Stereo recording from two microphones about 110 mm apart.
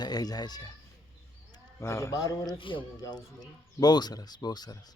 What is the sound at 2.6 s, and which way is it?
Speech, 50° left (ahead or behind).